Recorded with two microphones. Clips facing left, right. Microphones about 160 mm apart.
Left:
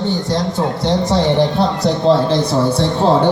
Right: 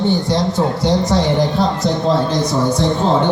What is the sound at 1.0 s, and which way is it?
A man's voice, 30° left (ahead or behind).